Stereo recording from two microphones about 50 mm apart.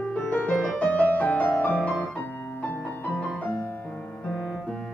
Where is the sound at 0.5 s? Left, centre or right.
Centre.